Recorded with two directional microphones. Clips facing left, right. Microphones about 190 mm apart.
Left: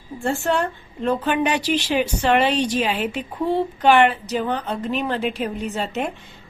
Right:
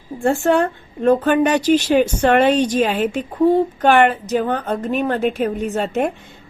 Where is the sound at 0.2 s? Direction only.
55° right (ahead or behind).